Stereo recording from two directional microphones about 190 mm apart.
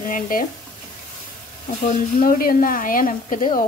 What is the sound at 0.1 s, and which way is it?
Speech, 45° left (ahead or behind).